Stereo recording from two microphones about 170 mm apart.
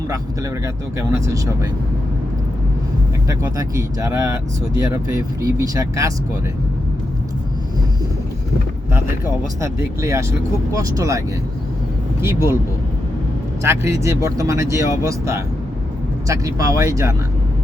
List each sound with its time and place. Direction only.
0.6 s speech: 15° right (ahead or behind)
3.2 s speech: 20° right (ahead or behind)
9.6 s speech: 15° right (ahead or behind)
12.2 s speech: 15° right (ahead or behind)
13.6 s speech: 15° right (ahead or behind)